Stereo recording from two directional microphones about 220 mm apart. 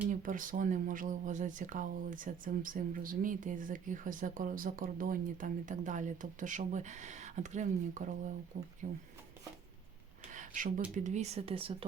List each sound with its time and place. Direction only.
0.1 s speech: 35° right (ahead or behind)
10.3 s a sound: 35° right (ahead or behind)
10.9 s speech: 35° right (ahead or behind)